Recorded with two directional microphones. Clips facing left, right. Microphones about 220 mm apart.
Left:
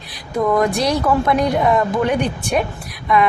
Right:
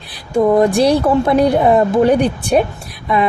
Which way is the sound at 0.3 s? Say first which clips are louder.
Right 5 dB; 30° right (ahead or behind).